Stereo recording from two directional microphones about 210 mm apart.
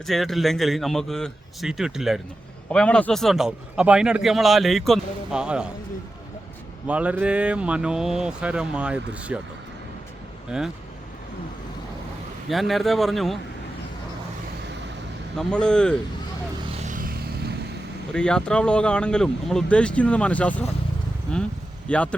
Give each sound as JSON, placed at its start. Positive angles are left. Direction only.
{"t": 0.0, "sound": "a man's voice", "side_deg": 0}
{"t": 6.8, "sound": "a man's voice", "side_deg": -5}
{"t": 10.5, "sound": "a man's voice", "side_deg": -5}
{"t": 12.5, "sound": "a man's voice", "side_deg": 0}
{"t": 15.4, "sound": "a man's voice", "side_deg": 5}
{"t": 16.8, "sound": "vehicle", "side_deg": -40}
{"t": 18.1, "sound": "a man's voice", "side_deg": 5}